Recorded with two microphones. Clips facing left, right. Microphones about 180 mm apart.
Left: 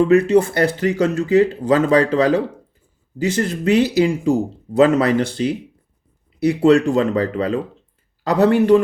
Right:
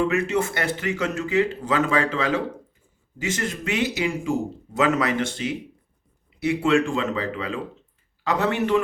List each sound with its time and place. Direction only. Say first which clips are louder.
0.1 s speech: left 10 dB; 35° left (ahead or behind)